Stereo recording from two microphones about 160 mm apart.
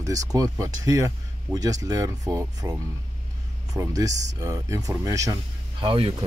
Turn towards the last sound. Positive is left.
turn(degrees=-35)  # may be behind; listen again after turning